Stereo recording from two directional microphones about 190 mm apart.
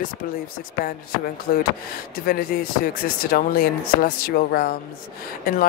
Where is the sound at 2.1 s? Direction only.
50° left (ahead or behind).